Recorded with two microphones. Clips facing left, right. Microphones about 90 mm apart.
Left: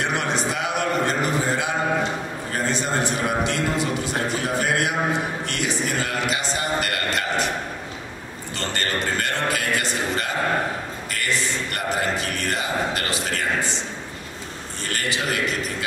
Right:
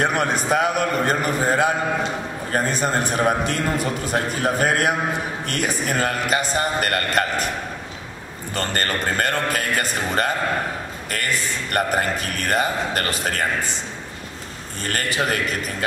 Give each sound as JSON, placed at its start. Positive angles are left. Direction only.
{"t": 0.0, "sound": "a man's voice", "side_deg": -45}
{"t": 8.5, "sound": "a man's voice", "side_deg": -45}
{"t": 14.9, "sound": "a man's voice", "side_deg": -45}